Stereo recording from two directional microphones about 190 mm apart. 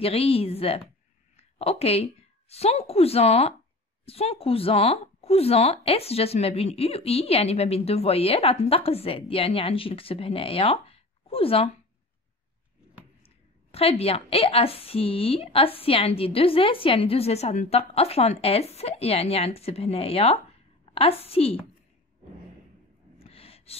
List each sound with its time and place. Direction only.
0.0 s speech: 30° left (ahead or behind)
1.3 s a sound: 35° left (ahead or behind)
2.5 s speech: 35° left (ahead or behind)
13.2 s a woman's voice: 30° left (ahead or behind)
23.1 s gasp: 30° left (ahead or behind)